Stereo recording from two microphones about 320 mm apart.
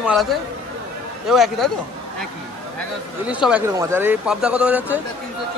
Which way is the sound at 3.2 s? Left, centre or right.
Centre.